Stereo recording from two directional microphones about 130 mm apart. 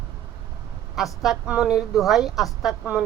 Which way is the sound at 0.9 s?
Centre (ahead or behind).